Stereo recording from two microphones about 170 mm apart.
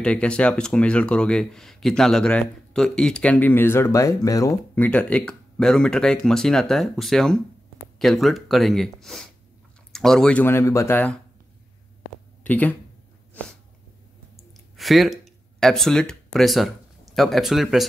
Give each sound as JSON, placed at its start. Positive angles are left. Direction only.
{"t": 0.0, "sound": "speech", "side_deg": 5}
{"t": 12.4, "sound": "speech", "side_deg": 10}
{"t": 14.8, "sound": "speech", "side_deg": 0}